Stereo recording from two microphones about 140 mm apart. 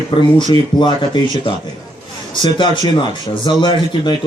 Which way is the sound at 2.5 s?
35° left (ahead or behind).